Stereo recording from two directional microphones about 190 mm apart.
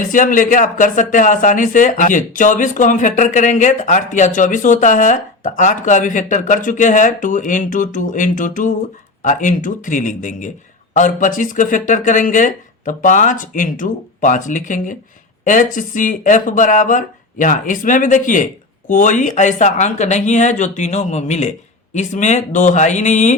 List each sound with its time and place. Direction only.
0.1 s speech: 45° left (ahead or behind)